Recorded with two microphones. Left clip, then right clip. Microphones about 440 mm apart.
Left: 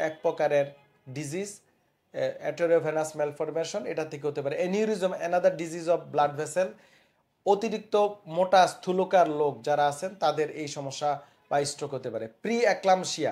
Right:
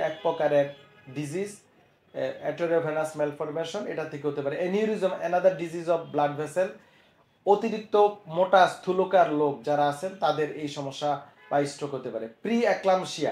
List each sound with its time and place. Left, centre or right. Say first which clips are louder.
0.0 s speech: right 1 dB; left